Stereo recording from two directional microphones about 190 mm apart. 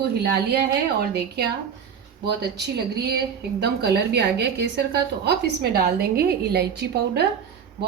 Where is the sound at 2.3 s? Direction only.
60° right (ahead or behind).